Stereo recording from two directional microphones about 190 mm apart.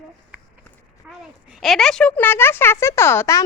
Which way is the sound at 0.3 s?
10° right (ahead or behind).